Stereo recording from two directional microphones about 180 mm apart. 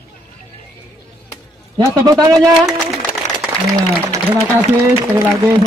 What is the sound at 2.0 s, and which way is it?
Speech, 20° right (ahead or behind).